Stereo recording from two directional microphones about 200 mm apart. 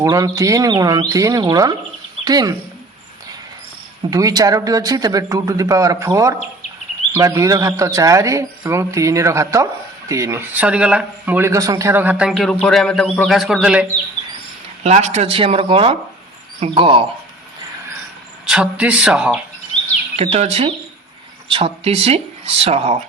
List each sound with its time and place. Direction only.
0.0 s speech: 15° right (ahead or behind)
4.1 s speech: 20° right (ahead or behind)
14.8 s speech: 35° right (ahead or behind)
18.4 s speech: 5° right (ahead or behind)
20.1 s speech: 30° right (ahead or behind)